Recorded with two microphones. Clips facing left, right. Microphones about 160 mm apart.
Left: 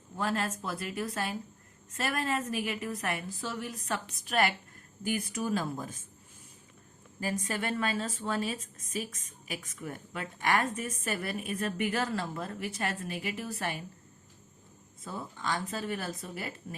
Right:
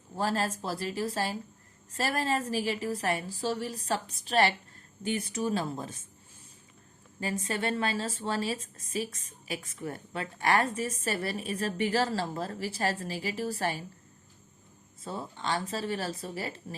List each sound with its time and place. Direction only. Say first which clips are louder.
0.2 s a woman's voice: right 2 dB; 35° right (ahead or behind)
7.2 s a woman's voice: right 1 dB; 30° right (ahead or behind)
15.0 s a woman's voice: right 2 dB; 30° right (ahead or behind)